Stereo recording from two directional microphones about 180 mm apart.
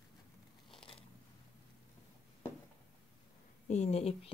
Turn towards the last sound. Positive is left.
turn(degrees=35)  # may be behind; listen again after turning